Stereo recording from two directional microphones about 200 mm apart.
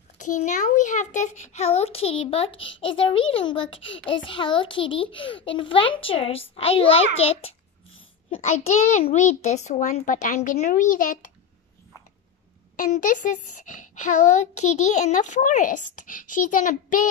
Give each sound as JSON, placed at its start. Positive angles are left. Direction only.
{"t": 0.2, "sound": "a child's voice", "side_deg": 40}
{"t": 12.7, "sound": "speech", "side_deg": 40}